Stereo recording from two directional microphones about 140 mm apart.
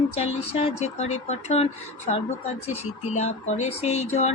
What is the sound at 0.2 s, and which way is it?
Speech, 45° left (ahead or behind).